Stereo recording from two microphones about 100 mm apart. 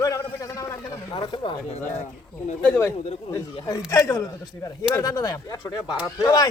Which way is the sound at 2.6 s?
25° left (ahead or behind).